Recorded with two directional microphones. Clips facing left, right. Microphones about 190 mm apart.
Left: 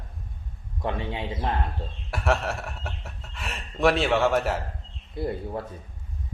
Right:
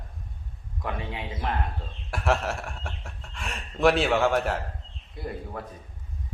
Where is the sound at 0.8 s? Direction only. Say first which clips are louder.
Left 4 dB; 30° left (ahead or behind).